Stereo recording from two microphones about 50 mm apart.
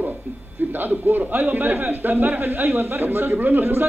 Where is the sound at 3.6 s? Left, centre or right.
Right.